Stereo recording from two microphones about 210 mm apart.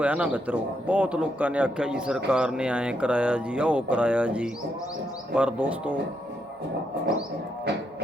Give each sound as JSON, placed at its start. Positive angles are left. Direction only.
{"t": 0.0, "sound": "speech", "side_deg": -5}